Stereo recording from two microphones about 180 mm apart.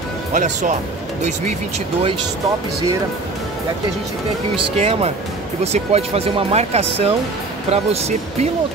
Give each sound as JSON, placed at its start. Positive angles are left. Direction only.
{"t": 0.3, "sound": "speech", "side_deg": -45}
{"t": 4.7, "sound": "speech", "side_deg": -35}